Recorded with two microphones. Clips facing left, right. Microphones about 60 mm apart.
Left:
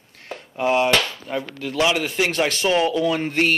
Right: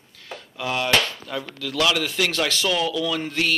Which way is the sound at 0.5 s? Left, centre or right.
Left.